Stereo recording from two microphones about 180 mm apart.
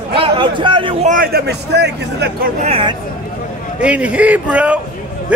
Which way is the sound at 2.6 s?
35° right (ahead or behind).